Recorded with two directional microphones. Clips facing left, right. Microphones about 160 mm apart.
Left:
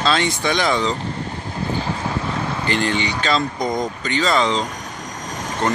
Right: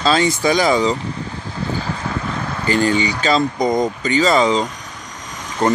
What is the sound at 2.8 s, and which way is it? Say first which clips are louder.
Speech: right 4 dB; 5° right (ahead or behind).